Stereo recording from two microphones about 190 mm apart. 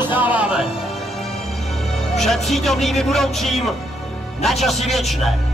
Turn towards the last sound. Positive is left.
turn(degrees=0)  # may be behind; listen again after turning